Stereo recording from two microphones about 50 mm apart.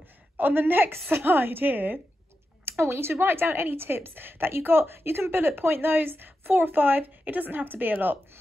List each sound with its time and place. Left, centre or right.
0.4 s a woman's voice: right
2.6 s a woman's voice: right